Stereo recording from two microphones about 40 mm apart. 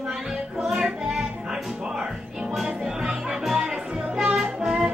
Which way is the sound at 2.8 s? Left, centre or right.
Centre.